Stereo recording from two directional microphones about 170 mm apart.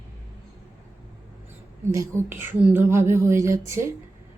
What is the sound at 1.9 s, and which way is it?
Speech, 15° right (ahead or behind).